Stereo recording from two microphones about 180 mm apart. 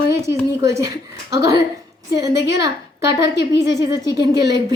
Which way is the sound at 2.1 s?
20° right (ahead or behind).